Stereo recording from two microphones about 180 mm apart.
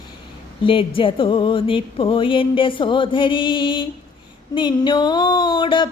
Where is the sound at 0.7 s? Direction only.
30° left (ahead or behind).